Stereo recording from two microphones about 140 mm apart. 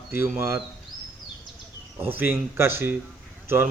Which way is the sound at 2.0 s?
15° right (ahead or behind).